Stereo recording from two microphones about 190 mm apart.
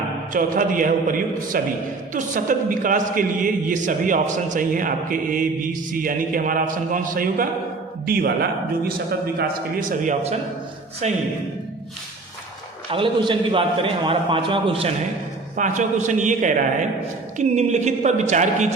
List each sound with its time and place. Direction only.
0.3 s a man's voice: 45° right (ahead or behind)
9.9 s a man's voice: 45° right (ahead or behind)
12.9 s a man's voice: 25° right (ahead or behind)
15.5 s a man's voice: 40° right (ahead or behind)